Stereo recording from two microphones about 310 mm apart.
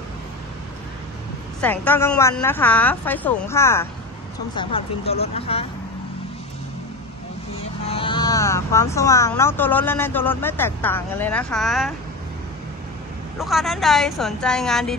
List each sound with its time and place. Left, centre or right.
1.6 s speech: centre
7.9 s speech: centre
13.4 s speech: centre